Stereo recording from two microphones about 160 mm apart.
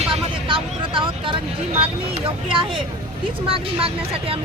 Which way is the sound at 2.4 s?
35° right (ahead or behind).